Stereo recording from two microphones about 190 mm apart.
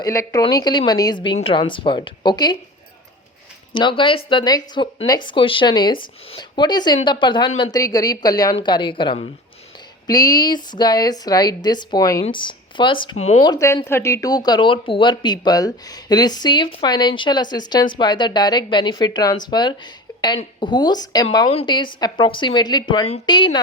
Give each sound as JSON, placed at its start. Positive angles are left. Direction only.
{"t": 0.0, "sound": "speech", "side_deg": 15}
{"t": 3.8, "sound": "speech", "side_deg": 25}
{"t": 13.4, "sound": "speech", "side_deg": 20}